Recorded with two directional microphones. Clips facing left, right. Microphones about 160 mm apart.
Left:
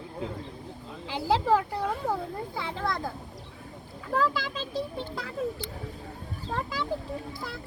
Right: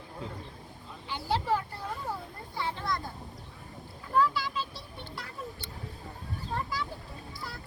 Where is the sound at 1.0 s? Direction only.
90° left.